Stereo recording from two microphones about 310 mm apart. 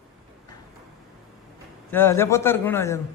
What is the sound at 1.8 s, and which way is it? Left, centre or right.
A man's voice, centre.